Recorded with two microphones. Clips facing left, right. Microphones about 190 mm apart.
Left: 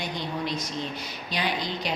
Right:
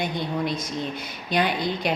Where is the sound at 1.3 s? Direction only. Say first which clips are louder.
Right 6 dB; 55° right (ahead or behind).